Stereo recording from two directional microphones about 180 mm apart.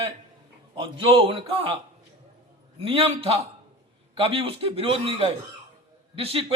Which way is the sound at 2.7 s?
30° right (ahead or behind).